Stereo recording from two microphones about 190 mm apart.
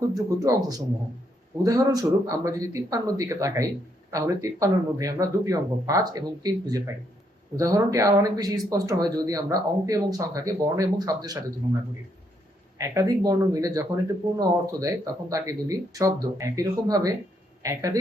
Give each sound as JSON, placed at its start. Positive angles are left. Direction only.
{"t": 0.1, "sound": "speech", "side_deg": -20}
{"t": 12.8, "sound": "speech", "side_deg": -15}